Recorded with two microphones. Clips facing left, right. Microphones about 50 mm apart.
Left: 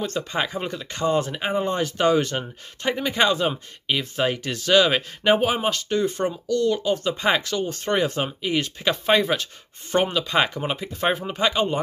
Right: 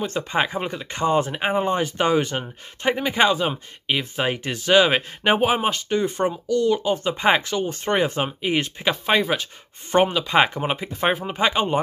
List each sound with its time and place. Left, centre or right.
0.0 s speech: centre
8.8 s speech: centre
9.9 s speech: centre